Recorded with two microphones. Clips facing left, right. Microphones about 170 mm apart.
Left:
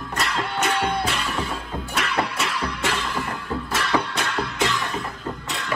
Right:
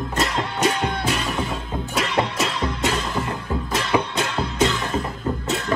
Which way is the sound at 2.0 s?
25° right (ahead or behind).